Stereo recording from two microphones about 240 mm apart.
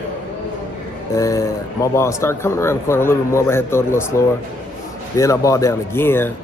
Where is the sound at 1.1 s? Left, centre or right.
Centre.